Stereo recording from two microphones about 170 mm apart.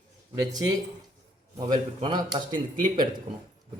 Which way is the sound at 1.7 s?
25° right (ahead or behind).